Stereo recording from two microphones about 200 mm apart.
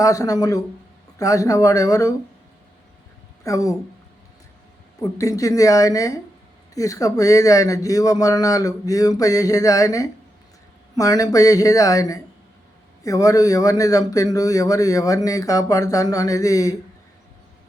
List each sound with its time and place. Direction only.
0.0 s a man's voice: 15° left (ahead or behind)
3.4 s a man's voice: 15° left (ahead or behind)
5.1 s a man's voice: 15° left (ahead or behind)